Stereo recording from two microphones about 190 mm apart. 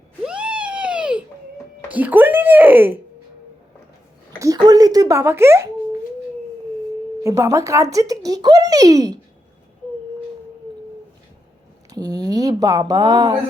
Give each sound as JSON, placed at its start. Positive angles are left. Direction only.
{"t": 0.2, "sound": "cat", "side_deg": -5}
{"t": 1.9, "sound": "speech", "side_deg": -10}
{"t": 4.4, "sound": "speech", "side_deg": -20}
{"t": 7.2, "sound": "a child's voice", "side_deg": -15}
{"t": 11.9, "sound": "a child's voice", "side_deg": -20}